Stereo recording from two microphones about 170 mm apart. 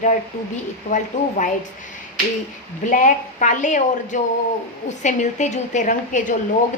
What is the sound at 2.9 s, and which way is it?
A woman's voice, 45° left (ahead or behind).